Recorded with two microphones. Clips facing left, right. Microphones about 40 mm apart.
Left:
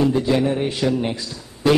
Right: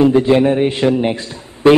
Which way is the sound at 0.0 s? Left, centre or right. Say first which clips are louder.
Right 7 dB; right.